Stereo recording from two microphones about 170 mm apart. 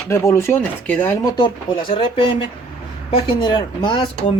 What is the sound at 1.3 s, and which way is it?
Speech, 30° left (ahead or behind).